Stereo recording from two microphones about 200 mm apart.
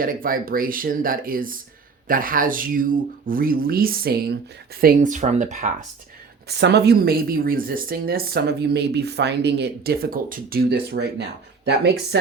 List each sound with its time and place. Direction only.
0.0 s speech: 45° right (ahead or behind)
6.5 s speech: 55° right (ahead or behind)